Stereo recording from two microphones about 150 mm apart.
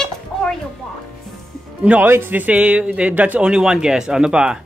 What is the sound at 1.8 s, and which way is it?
Speech, 10° right (ahead or behind).